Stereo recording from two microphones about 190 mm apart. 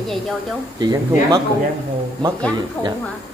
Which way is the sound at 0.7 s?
20° right (ahead or behind).